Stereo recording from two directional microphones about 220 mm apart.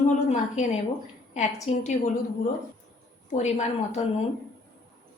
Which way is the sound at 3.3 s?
30° left (ahead or behind).